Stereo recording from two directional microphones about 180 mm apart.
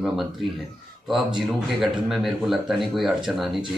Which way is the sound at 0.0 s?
Centre (ahead or behind).